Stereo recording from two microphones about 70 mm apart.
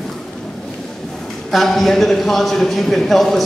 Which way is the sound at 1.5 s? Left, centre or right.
Centre.